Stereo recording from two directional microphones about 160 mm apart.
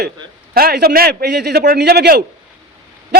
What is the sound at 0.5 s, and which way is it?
A man's voice, 70° right (ahead or behind).